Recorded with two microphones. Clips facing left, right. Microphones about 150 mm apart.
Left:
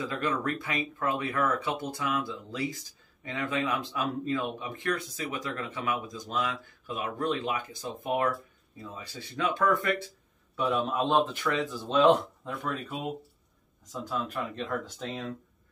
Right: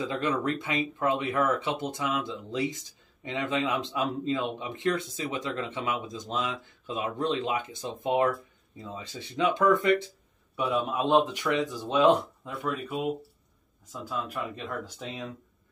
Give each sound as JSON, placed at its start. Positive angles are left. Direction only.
{"t": 0.0, "sound": "speech", "side_deg": -20}
{"t": 14.0, "sound": "speech", "side_deg": -10}